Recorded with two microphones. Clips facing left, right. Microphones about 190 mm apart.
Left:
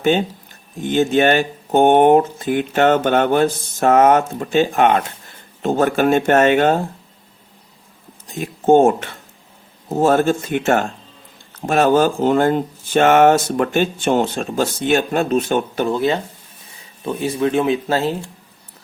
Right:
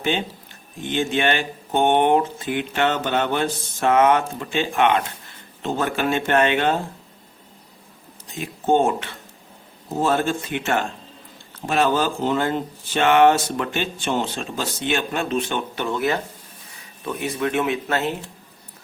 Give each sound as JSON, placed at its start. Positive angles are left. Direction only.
{"t": 0.0, "sound": "speech", "side_deg": 45}
{"t": 8.3, "sound": "speech", "side_deg": 45}
{"t": 16.0, "sound": "speech", "side_deg": 25}